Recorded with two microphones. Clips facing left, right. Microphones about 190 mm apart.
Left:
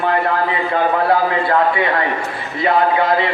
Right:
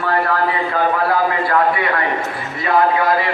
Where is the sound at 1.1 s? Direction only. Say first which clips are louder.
Left 2 dB; 25° left (ahead or behind).